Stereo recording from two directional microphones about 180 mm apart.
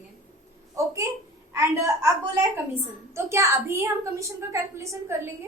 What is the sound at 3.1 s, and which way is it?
A woman's voice, 15° right (ahead or behind).